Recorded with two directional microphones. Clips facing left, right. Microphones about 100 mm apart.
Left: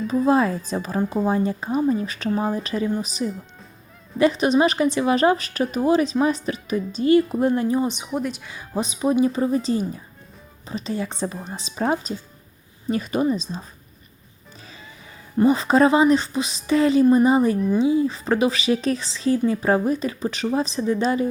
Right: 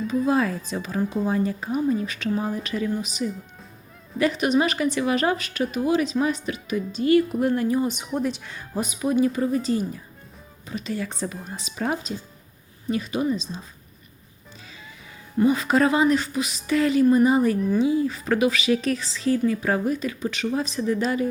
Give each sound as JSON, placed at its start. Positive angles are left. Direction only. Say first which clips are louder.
{"t": 0.3, "sound": "speech", "louder": "left 6 dB", "side_deg": 30}
{"t": 1.3, "sound": "speech", "louder": "left 2 dB", "side_deg": 25}
{"t": 8.0, "sound": "speech", "louder": "even", "side_deg": 5}
{"t": 8.7, "sound": "speech", "louder": "left 2 dB", "side_deg": 25}
{"t": 12.9, "sound": "speech", "louder": "left 3 dB", "side_deg": 45}
{"t": 15.4, "sound": "speech", "louder": "left 3 dB", "side_deg": 30}